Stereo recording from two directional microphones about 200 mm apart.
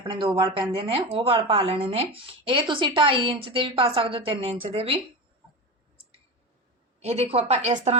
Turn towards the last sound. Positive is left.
turn(degrees=-35)  # may be behind; listen again after turning